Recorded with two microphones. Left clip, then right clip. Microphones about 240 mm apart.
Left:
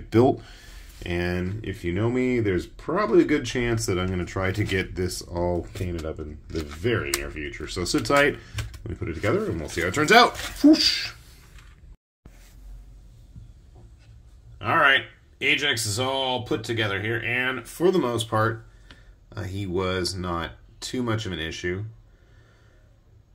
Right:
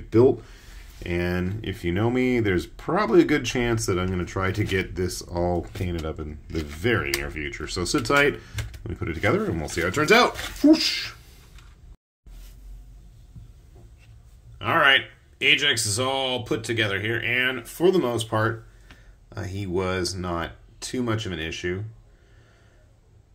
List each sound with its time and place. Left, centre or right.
0.1 s speech: centre
1.0 s speech: centre
9.8 s speech: centre
14.6 s speech: centre